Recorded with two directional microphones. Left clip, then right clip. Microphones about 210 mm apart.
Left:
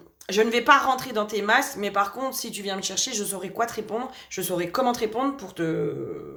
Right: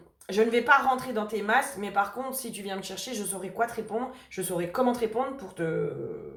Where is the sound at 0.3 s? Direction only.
40° left (ahead or behind).